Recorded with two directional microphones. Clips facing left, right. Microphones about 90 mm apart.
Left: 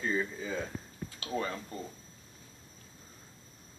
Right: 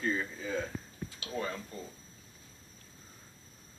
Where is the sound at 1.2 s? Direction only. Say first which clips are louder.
Left 6 dB; 40° left (ahead or behind).